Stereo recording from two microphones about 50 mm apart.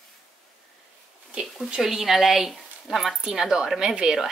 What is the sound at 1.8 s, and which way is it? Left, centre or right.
Speech, centre.